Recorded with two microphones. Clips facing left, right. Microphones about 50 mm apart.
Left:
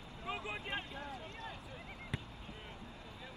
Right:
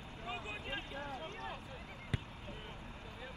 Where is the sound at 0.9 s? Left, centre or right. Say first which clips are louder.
Right 2 dB; right.